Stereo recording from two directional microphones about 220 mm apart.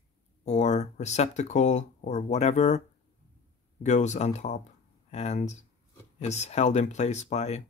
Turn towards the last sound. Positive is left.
turn(degrees=30)  # may be behind; listen again after turning